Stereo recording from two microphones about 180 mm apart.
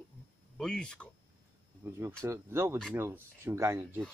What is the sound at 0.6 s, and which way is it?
Speech, 5° left (ahead or behind).